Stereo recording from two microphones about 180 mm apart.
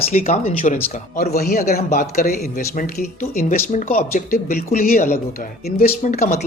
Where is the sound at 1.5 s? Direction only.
40° left (ahead or behind).